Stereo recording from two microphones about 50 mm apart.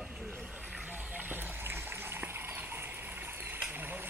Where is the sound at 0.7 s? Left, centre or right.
Right.